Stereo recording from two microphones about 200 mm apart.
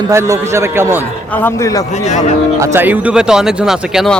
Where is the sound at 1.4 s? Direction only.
15° left (ahead or behind).